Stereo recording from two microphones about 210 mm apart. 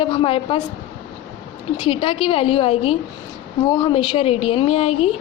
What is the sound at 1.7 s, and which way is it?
A woman's voice, 25° left (ahead or behind).